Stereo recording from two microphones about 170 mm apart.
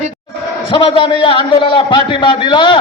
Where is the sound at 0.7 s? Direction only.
30° left (ahead or behind).